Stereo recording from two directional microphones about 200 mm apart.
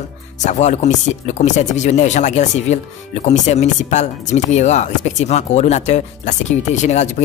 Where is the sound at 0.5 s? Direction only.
35° left (ahead or behind).